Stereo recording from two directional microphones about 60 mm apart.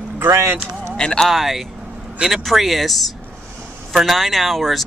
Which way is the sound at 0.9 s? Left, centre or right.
Centre.